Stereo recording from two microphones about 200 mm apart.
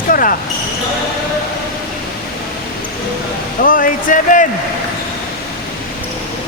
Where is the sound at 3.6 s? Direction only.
45° left (ahead or behind).